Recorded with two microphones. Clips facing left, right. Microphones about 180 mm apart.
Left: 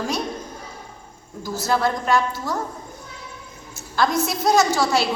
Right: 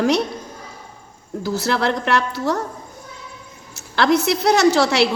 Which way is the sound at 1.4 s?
70° right (ahead or behind).